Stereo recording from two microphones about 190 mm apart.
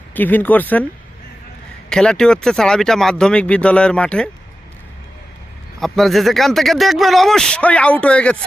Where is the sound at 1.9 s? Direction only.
5° left (ahead or behind).